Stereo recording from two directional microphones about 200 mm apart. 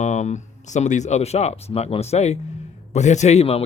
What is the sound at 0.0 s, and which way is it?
Speech, 35° left (ahead or behind).